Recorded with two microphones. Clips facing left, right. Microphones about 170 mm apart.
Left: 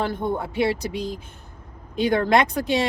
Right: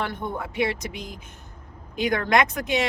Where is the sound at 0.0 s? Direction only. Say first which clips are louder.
Left 5 dB; 30° left (ahead or behind).